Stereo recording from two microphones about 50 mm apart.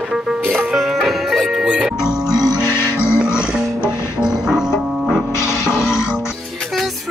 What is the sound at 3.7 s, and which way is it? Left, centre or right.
Music, left.